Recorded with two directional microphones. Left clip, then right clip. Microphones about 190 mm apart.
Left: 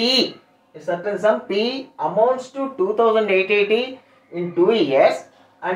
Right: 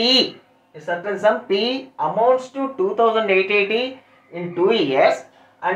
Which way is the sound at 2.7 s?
10° left (ahead or behind).